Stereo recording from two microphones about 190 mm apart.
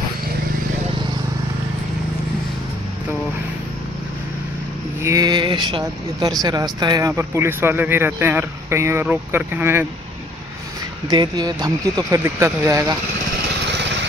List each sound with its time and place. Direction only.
5.0 s speech: 20° right (ahead or behind)
11.1 s speech: 20° right (ahead or behind)
13.7 s vehicle: 65° right (ahead or behind)